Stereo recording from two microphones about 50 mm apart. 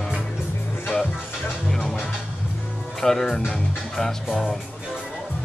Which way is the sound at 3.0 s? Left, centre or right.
Centre.